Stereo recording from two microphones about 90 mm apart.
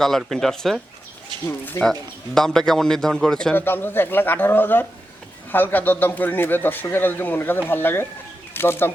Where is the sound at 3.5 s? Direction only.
25° left (ahead or behind).